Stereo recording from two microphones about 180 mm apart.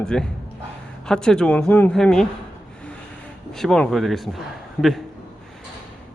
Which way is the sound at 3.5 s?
Centre (ahead or behind).